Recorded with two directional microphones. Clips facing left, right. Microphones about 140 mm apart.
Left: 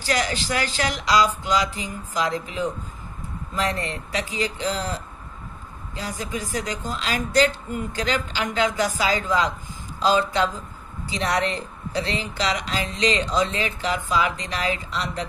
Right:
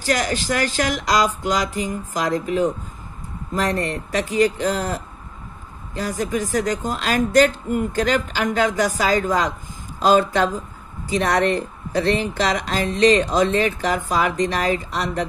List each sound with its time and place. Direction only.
0.0 s speech: 45° right (ahead or behind)